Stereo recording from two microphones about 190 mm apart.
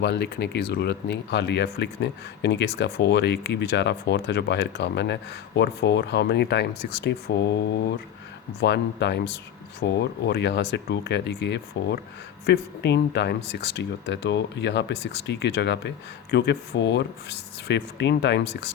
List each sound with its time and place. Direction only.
0.0 s speech: 65° left (ahead or behind)
8.6 s speech: 65° left (ahead or behind)